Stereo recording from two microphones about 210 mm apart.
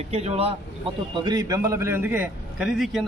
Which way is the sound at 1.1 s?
20° right (ahead or behind).